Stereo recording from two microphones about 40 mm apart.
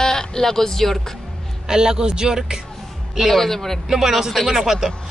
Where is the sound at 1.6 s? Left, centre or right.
Centre.